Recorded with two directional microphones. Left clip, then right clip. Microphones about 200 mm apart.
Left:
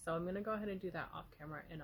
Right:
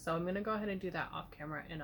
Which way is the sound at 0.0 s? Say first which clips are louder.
Right 4 dB; 30° left (ahead or behind).